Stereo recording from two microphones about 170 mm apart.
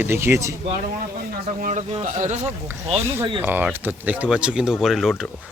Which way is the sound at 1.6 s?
45° right (ahead or behind).